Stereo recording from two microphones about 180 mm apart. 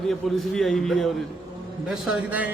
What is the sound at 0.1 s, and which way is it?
A man's voice, centre (ahead or behind).